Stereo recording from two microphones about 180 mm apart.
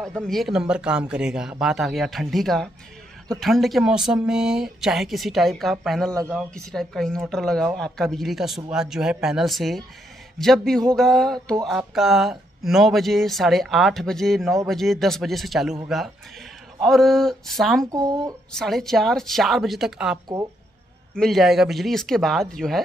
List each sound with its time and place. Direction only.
0.0 s speech: centre (ahead or behind)
17.9 s speech: 20° right (ahead or behind)
18.5 s speech: centre (ahead or behind)